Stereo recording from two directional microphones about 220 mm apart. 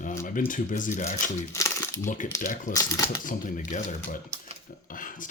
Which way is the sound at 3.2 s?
40° left (ahead or behind).